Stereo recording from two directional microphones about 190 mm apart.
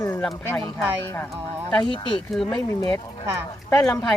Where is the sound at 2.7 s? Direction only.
20° left (ahead or behind).